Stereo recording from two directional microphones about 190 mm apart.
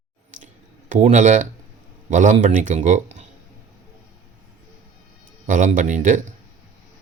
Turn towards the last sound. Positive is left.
turn(degrees=-40)  # may be behind; listen again after turning